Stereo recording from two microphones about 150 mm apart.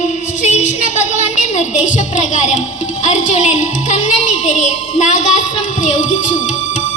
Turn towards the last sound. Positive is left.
turn(degrees=55)  # may be behind; listen again after turning